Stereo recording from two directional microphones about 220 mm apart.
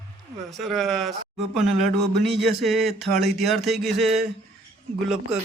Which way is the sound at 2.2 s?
Centre (ahead or behind).